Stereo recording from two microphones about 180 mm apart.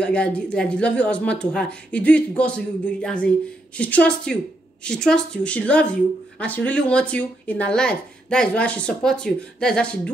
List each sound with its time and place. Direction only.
0.0 s speech: 5° left (ahead or behind)